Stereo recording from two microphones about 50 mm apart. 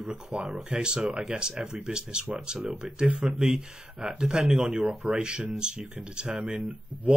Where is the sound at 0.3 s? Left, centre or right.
Centre.